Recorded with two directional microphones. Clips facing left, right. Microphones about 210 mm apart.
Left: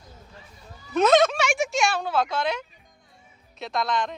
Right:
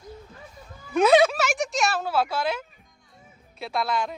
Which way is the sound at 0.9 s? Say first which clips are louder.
Right 1 dB; 10° right (ahead or behind).